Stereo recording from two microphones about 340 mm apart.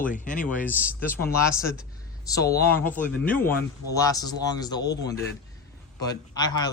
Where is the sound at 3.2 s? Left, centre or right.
Centre.